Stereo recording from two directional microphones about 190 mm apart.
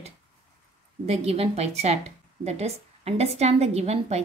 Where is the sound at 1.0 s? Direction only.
35° right (ahead or behind).